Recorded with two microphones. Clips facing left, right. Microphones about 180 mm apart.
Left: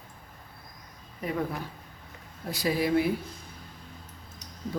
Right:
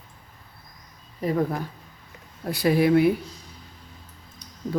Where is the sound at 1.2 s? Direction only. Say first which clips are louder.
Right 7 dB; 40° right (ahead or behind).